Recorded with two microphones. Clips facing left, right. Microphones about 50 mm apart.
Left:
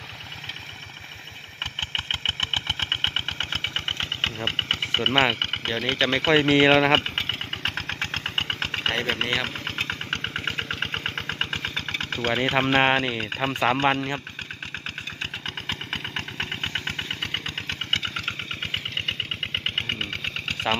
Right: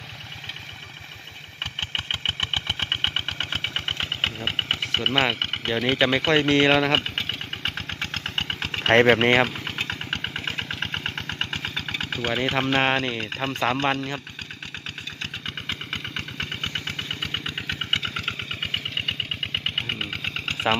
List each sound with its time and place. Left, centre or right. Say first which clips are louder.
1.9 s engine: even; centre
4.8 s speech: left 2 dB; centre
8.2 s engine: left 1 dB; centre
8.9 s speech: right 12 dB; right
9.5 s engine: even; centre
12.6 s speech: left 2 dB; centre
15.4 s vehicle: right 1 dB; centre
18.1 s engine: right 1 dB; centre